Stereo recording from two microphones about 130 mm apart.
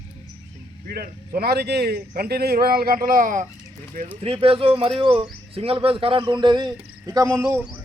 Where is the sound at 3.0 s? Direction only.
90° right.